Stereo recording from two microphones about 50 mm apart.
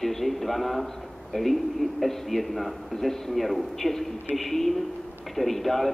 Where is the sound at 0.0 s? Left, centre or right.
Centre.